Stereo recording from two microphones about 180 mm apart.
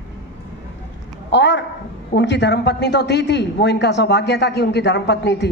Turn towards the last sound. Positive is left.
turn(degrees=70)  # may be behind; listen again after turning